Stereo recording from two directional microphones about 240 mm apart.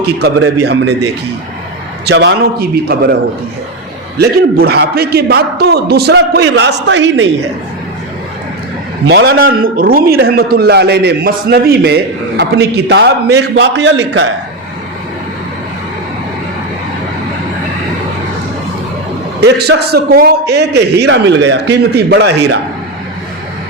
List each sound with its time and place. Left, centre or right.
0.0 s a man's voice: right
2.0 s a man's voice: right
4.2 s a man's voice: right
9.0 s a man's voice: right
19.4 s a man's voice: right